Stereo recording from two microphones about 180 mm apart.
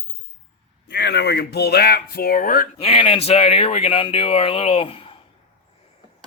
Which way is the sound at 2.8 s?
30° left (ahead or behind).